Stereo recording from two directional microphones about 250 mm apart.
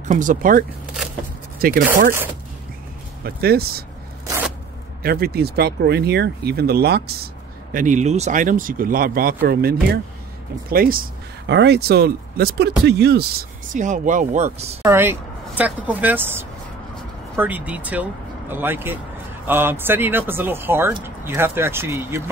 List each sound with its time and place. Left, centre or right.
0.0 s speech: right
3.3 s speech: right
5.0 s speech: right
14.8 s speech: centre